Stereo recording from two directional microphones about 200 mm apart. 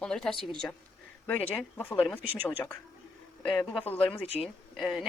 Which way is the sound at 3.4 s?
5° left (ahead or behind).